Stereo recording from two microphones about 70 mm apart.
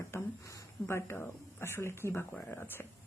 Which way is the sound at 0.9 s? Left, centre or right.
Left.